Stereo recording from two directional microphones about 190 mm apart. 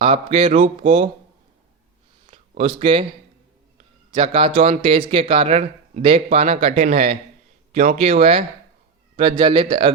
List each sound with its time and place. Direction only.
0.0 s a man's voice: 30° right (ahead or behind)
0.5 s speech: 40° right (ahead or behind)
2.2 s a sound: 35° right (ahead or behind)
4.1 s a man's voice: 30° right (ahead or behind)